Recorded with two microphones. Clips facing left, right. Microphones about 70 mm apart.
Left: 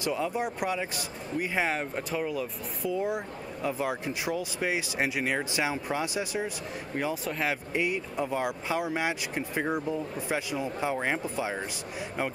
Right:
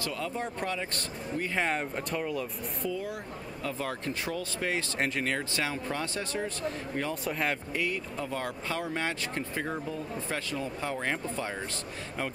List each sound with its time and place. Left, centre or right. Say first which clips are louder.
0.0 s speech: left 4 dB; centre
2.9 s speech: left 9 dB; left
7.2 s speech: even; centre
7.7 s speech: left 3 dB; centre